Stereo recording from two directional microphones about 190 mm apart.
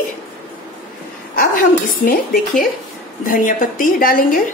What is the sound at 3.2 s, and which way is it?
Speech, 45° left (ahead or behind).